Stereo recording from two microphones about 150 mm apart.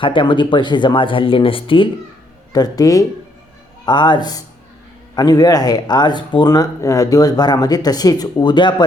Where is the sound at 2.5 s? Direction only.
25° left (ahead or behind).